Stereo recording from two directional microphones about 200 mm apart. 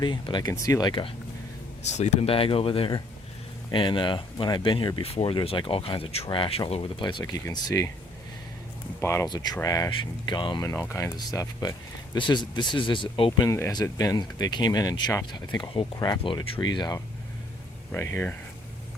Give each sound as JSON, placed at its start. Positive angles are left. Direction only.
{"t": 0.0, "sound": "speech", "side_deg": 25}
{"t": 1.8, "sound": "speech", "side_deg": 35}
{"t": 9.0, "sound": "speech", "side_deg": 15}